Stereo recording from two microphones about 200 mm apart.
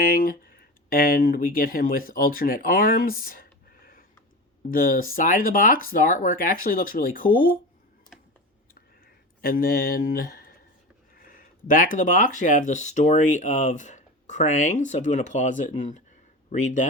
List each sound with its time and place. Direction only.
0.0 s speech: 45° left (ahead or behind)
9.4 s speech: 45° left (ahead or behind)